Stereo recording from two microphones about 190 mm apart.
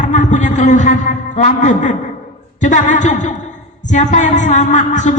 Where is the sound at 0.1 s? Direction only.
40° left (ahead or behind).